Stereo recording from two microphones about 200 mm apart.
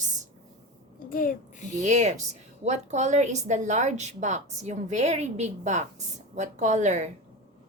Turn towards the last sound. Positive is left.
turn(degrees=-35)  # may be behind; listen again after turning